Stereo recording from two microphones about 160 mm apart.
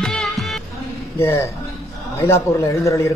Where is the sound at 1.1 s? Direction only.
20° left (ahead or behind).